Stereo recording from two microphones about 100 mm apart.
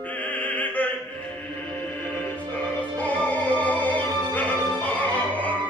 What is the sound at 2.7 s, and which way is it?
Music, 15° left (ahead or behind).